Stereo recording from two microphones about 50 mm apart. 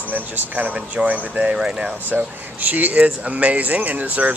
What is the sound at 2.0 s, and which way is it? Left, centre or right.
Speech, right.